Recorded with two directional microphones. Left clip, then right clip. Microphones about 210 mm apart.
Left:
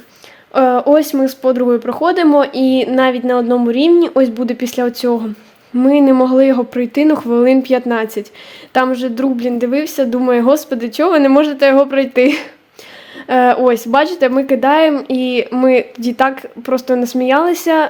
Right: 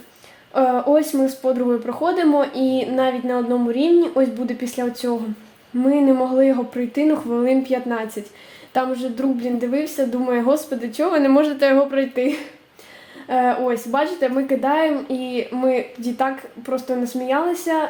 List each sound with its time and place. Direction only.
0.5 s speech: 40° left (ahead or behind)